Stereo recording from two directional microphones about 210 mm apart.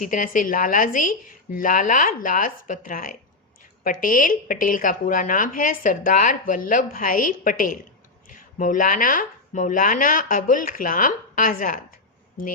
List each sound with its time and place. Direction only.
0.0 s speech: 40° left (ahead or behind)